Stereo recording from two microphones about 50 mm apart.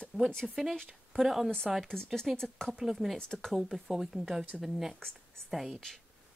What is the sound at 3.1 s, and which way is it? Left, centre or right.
Speech, centre.